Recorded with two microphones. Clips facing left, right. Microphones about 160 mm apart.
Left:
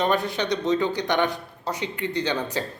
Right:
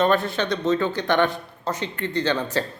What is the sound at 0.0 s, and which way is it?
Speech, 15° left (ahead or behind).